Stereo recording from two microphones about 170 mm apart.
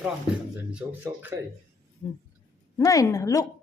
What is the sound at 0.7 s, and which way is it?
Speech, 10° right (ahead or behind).